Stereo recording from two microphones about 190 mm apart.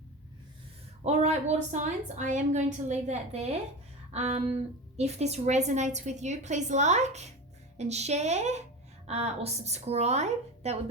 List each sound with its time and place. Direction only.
1.0 s a woman's voice: 35° right (ahead or behind)